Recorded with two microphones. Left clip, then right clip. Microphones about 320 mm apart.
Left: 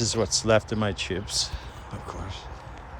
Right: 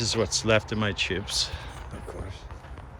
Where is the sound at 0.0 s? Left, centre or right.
Centre.